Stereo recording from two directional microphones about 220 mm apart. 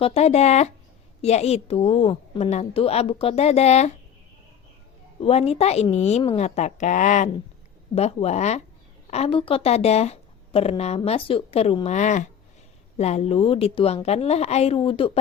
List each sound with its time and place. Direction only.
0.0 s a woman's voice: 30° left (ahead or behind)
5.2 s a woman's voice: 30° left (ahead or behind)